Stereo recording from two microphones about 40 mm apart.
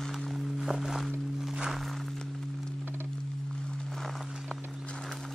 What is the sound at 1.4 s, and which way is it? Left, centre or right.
Music, centre.